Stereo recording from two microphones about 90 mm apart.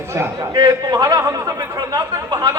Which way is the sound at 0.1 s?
30° right (ahead or behind).